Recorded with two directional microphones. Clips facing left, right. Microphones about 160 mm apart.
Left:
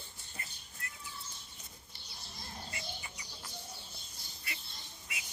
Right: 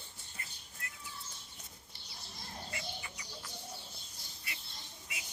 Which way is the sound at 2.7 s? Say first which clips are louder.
Right 1 dB; 30° left (ahead or behind).